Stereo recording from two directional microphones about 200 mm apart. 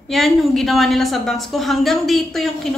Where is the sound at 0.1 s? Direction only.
Centre (ahead or behind).